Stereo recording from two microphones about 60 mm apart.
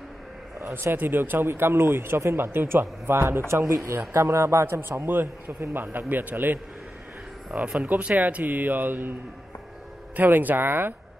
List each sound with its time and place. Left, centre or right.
0.6 s a sound: right
0.9 s speech: right
4.6 s a man's voice: right
10.1 s a man's voice: right